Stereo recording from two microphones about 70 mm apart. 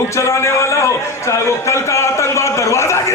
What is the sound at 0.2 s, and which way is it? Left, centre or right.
A man's voice, left.